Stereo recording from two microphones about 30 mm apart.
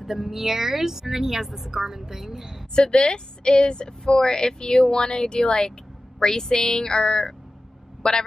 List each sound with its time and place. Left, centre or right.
0.0 s speech: centre
2.7 s a woman's voice: left
8.0 s speech: centre